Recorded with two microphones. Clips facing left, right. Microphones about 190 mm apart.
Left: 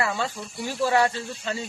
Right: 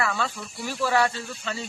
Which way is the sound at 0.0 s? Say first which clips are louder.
Left 1 dB; 20° left (ahead or behind).